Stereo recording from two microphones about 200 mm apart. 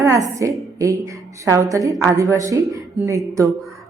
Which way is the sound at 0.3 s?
15° right (ahead or behind).